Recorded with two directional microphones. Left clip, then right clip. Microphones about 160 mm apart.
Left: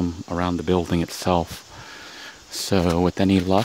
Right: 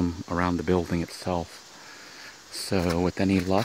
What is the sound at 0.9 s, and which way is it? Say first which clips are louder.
Speech: left 7 dB; 35° left (ahead or behind).